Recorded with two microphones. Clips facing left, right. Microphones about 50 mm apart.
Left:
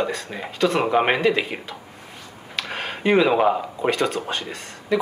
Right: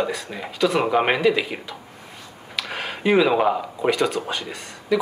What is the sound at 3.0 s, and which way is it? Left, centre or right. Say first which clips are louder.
Speech: even; centre.